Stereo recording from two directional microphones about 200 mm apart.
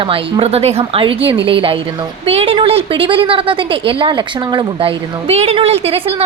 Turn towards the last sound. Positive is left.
turn(degrees=-30)  # may be behind; listen again after turning